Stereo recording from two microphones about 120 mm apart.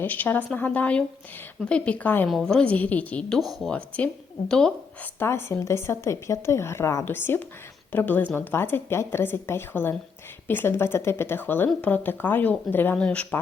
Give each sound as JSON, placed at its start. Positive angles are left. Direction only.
{"t": 0.0, "sound": "speech", "side_deg": 15}
{"t": 5.2, "sound": "speech", "side_deg": 20}